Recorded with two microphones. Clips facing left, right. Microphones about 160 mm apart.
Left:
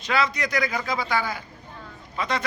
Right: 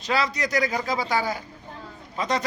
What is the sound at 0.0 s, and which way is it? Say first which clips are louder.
A man's voice: even; 35° right (ahead or behind).